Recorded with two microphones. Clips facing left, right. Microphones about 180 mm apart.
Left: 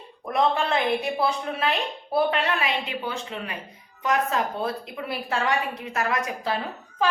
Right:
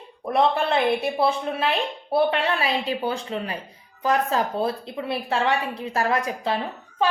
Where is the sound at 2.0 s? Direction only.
30° right (ahead or behind).